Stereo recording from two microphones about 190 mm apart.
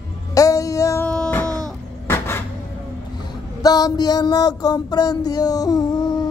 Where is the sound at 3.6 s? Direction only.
20° left (ahead or behind).